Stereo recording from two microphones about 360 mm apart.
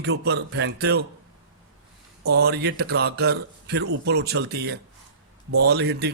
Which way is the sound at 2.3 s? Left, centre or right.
Right.